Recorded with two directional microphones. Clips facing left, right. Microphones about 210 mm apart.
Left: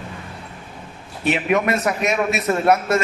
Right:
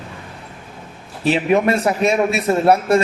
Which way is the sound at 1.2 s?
30° right (ahead or behind).